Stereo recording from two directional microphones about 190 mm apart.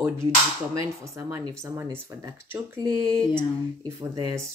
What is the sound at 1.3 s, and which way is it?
Speech, 15° right (ahead or behind).